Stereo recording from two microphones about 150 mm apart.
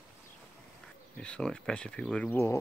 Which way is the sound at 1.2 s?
5° left (ahead or behind).